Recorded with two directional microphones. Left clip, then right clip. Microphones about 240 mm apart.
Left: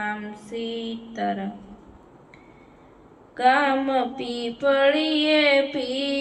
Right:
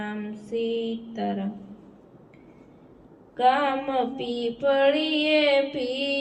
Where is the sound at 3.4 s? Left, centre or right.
Centre.